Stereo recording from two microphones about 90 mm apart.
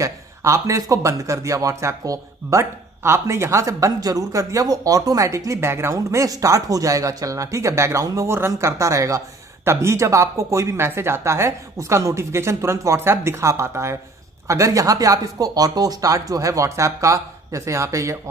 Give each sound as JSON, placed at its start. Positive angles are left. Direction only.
{"t": 0.0, "sound": "speech", "side_deg": -35}